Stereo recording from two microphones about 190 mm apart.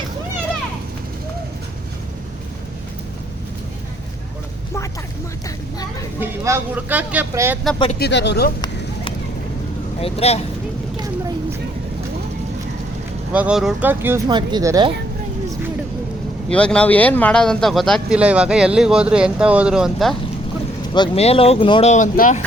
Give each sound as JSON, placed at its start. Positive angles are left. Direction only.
{"t": 6.1, "sound": "speech", "side_deg": -10}
{"t": 7.9, "sound": "speech", "side_deg": 60}
{"t": 10.0, "sound": "speech", "side_deg": 35}
{"t": 13.3, "sound": "speech", "side_deg": -5}
{"t": 14.3, "sound": "speech", "side_deg": -20}
{"t": 16.5, "sound": "speech", "side_deg": 5}
{"t": 20.9, "sound": "speech", "side_deg": 30}